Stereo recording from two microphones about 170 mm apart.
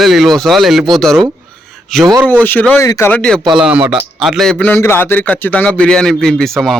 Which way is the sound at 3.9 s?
5° right (ahead or behind).